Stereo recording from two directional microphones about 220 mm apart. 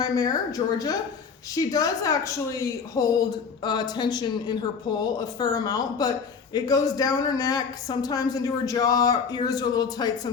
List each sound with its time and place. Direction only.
0.0 s a woman's voice: 15° left (ahead or behind)